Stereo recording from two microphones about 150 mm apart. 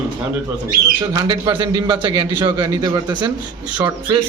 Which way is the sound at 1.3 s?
25° right (ahead or behind).